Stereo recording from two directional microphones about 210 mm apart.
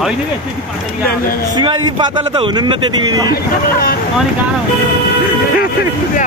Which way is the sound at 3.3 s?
45° left (ahead or behind).